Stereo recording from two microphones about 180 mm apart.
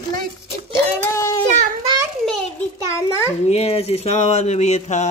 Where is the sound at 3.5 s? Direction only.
35° left (ahead or behind).